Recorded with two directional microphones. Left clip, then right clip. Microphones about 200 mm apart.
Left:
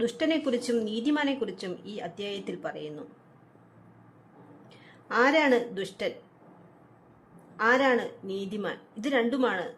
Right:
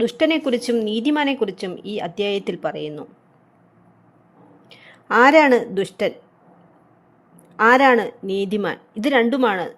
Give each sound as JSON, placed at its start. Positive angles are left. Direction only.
{"t": 0.0, "sound": "speech", "side_deg": -20}
{"t": 4.7, "sound": "a woman's voice", "side_deg": -30}
{"t": 7.5, "sound": "a woman's voice", "side_deg": -30}